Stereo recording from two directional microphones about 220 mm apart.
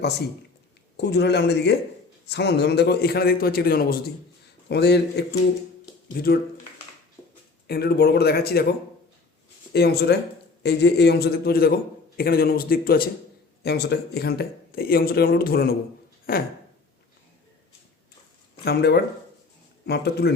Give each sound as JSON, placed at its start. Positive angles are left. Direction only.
{"t": 0.9, "sound": "speech", "side_deg": 50}
{"t": 7.7, "sound": "speech", "side_deg": 45}
{"t": 9.7, "sound": "speech", "side_deg": 45}
{"t": 18.6, "sound": "speech", "side_deg": 50}